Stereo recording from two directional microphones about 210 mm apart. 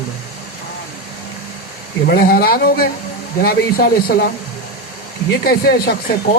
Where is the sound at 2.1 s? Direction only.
45° left (ahead or behind).